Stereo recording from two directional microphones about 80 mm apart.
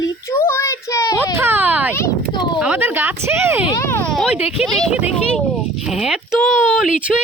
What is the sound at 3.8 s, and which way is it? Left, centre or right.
Speech, left.